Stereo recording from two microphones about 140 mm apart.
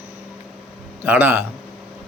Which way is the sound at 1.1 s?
15° right (ahead or behind).